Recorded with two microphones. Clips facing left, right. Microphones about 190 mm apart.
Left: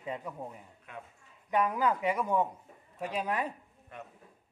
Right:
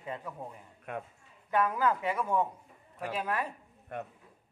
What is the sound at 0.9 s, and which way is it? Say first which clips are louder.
Speech: right 8 dB; 65° right (ahead or behind).